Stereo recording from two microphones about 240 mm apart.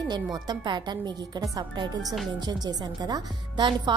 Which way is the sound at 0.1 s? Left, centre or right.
Centre.